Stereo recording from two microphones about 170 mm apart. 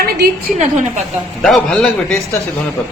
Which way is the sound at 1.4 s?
Centre (ahead or behind).